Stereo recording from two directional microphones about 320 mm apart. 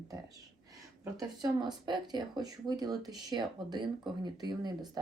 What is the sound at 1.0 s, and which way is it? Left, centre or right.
Speech, centre.